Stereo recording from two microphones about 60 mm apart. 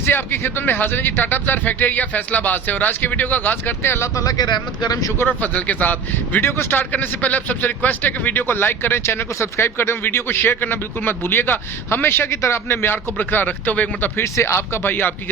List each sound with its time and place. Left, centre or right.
0.0 s a man's voice: left
4.1 s speech: left
4.9 s speech: left
5.3 s speech: left
6.4 s a man's voice: left
6.9 s a man's voice: left
14.2 s speech: left
14.8 s a man's voice: left